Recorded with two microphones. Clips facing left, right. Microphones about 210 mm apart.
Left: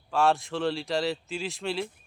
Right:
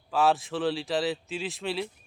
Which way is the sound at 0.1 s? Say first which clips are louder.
Even; centre (ahead or behind).